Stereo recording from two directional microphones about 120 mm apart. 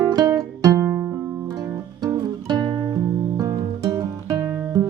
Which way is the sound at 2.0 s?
30° right (ahead or behind).